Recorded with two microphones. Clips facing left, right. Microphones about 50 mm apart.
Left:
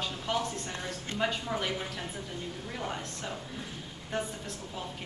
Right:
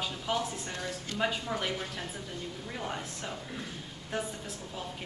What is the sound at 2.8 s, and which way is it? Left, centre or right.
Speech, centre.